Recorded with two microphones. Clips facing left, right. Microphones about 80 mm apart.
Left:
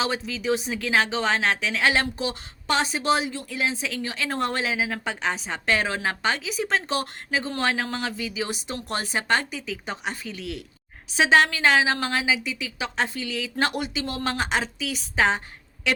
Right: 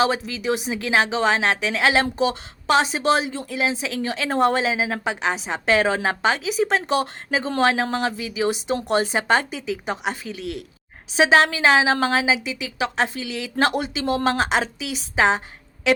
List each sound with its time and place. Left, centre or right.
0.0 s a woman's voice: centre
11.2 s a woman's voice: right